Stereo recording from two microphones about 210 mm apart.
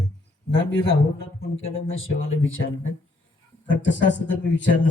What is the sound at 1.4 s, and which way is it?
Speech, 65° left (ahead or behind).